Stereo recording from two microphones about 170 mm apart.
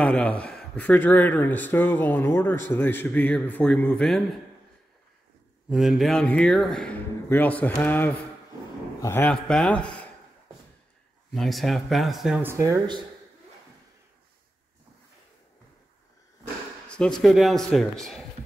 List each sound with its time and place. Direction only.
0.0 s speech: 5° left (ahead or behind)
5.7 s speech: centre (ahead or behind)
11.3 s speech: centre (ahead or behind)
12.4 s speech: 15° right (ahead or behind)
17.2 s speech: centre (ahead or behind)